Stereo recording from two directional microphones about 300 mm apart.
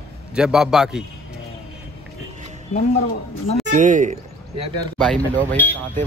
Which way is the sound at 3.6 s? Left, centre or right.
Right.